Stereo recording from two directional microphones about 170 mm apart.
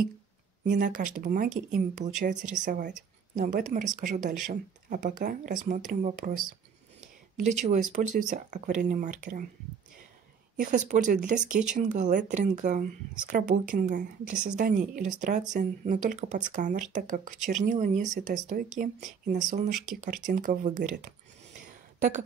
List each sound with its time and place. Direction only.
0.7 s a woman's voice: 50° right (ahead or behind)
7.3 s speech: 45° right (ahead or behind)
10.6 s speech: 50° right (ahead or behind)
17.4 s speech: centre (ahead or behind)
17.6 s speech: 50° right (ahead or behind)